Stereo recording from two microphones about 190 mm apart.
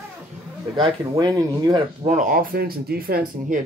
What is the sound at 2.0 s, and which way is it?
Speech, 45° right (ahead or behind).